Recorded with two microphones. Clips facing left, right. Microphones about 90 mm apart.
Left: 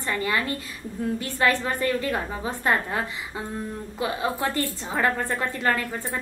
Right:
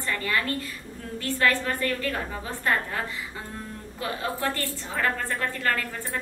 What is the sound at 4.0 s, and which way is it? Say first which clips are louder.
A woman's voice: left 3 dB; 15° left (ahead or behind).